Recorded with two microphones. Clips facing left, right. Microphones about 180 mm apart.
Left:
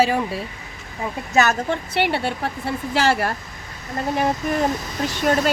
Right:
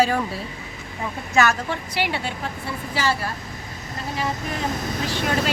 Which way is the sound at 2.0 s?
60° left (ahead or behind).